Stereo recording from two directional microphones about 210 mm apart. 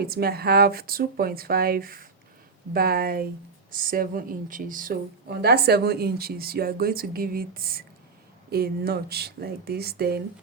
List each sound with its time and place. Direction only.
0.0 s a woman's voice: 45° right (ahead or behind)